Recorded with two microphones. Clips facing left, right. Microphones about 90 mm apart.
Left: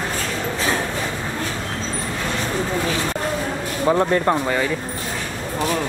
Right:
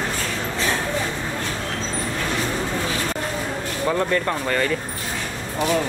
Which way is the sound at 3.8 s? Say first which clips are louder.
Left 4 dB; 20° left (ahead or behind).